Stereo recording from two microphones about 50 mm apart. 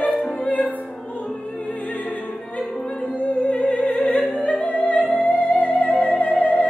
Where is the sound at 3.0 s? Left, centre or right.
Left.